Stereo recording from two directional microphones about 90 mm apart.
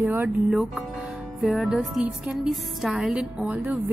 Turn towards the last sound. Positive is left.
turn(degrees=-15)  # may be behind; listen again after turning